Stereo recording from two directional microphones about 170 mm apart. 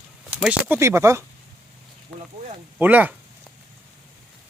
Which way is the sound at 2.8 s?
10° right (ahead or behind).